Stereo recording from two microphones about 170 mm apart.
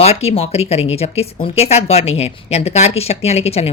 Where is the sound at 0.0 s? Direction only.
35° left (ahead or behind).